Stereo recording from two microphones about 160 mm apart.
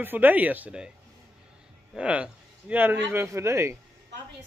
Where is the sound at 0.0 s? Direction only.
10° right (ahead or behind).